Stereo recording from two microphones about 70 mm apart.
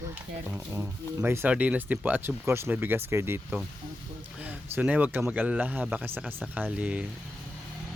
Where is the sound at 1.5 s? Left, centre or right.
Centre.